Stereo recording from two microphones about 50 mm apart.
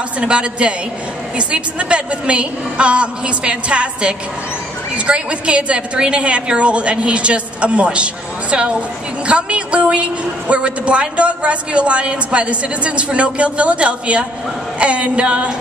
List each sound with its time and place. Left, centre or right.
0.2 s a woman's voice: right